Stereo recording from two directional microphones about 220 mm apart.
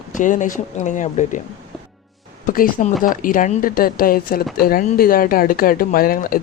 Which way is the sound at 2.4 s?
40° left (ahead or behind).